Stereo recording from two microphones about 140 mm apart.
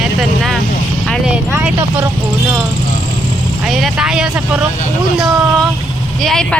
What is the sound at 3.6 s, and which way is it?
Vehicle, centre (ahead or behind).